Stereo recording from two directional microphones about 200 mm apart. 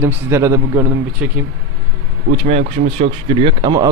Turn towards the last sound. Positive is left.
turn(degrees=-20)  # may be behind; listen again after turning